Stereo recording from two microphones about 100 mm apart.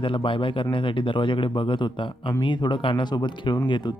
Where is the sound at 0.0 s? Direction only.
60° left (ahead or behind).